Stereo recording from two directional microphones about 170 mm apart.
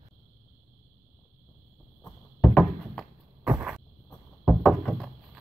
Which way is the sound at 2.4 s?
5° left (ahead or behind).